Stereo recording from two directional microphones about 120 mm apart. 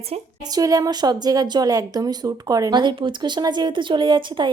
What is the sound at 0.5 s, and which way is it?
A woman's voice, 30° right (ahead or behind).